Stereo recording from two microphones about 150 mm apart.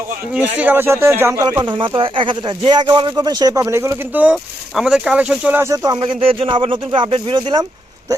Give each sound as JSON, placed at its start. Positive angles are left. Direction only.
{"t": 0.3, "sound": "speech", "side_deg": -10}